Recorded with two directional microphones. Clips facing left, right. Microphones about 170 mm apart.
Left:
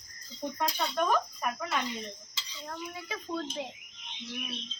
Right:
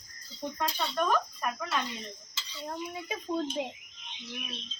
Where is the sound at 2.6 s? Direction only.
20° right (ahead or behind).